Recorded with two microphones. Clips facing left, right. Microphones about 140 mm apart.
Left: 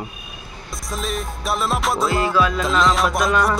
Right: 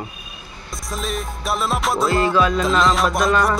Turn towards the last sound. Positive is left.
turn(degrees=0)  # may be behind; listen again after turning